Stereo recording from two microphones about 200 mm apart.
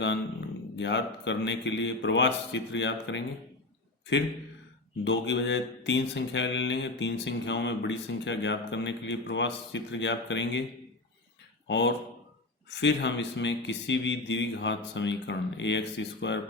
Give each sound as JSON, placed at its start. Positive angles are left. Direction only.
{"t": 0.8, "sound": "mantra", "side_deg": 65}
{"t": 5.0, "sound": "mantra", "side_deg": 65}
{"t": 11.7, "sound": "mantra", "side_deg": 65}